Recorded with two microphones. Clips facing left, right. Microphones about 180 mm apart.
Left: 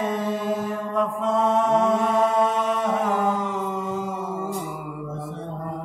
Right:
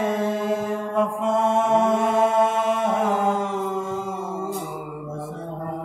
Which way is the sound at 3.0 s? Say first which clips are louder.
Right 1 dB; 25° right (ahead or behind).